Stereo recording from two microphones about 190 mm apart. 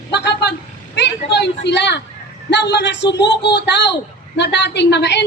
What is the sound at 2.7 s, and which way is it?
A woman's voice, 65° left (ahead or behind).